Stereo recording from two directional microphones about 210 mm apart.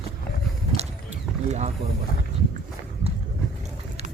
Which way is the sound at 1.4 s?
30° right (ahead or behind).